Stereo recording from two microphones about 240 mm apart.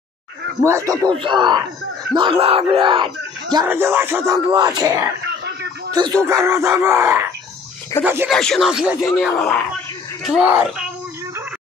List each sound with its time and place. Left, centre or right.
0.7 s groan: centre
1.0 s speech: centre
3.5 s groan: centre
5.4 s a sound: right
6.2 s groan: centre
8.3 s speech: centre